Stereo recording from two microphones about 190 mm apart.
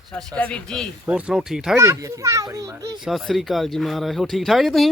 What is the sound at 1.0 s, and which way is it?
Speech, 5° right (ahead or behind).